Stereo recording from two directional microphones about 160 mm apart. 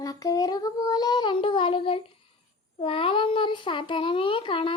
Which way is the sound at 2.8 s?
35° left (ahead or behind).